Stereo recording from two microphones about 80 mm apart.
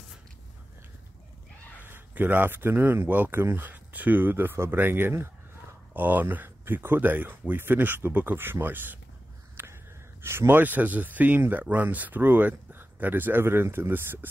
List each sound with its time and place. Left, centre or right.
1.8 s speech: right
9.6 s a sound: right
10.2 s speech: right